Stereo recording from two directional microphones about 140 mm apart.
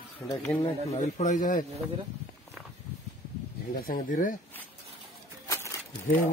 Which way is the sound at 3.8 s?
85° left.